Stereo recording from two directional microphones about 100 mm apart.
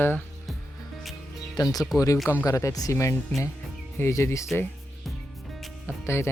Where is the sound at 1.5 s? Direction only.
40° left (ahead or behind).